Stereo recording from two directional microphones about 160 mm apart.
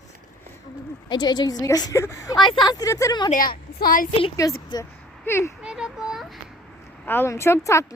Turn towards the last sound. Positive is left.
turn(degrees=15)  # may be behind; listen again after turning